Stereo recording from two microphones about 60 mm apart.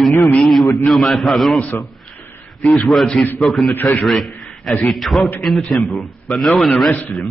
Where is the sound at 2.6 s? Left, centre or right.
Centre.